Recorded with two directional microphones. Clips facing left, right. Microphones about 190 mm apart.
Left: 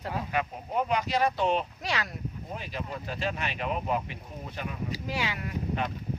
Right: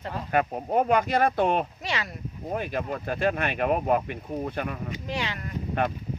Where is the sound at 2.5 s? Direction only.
55° right (ahead or behind).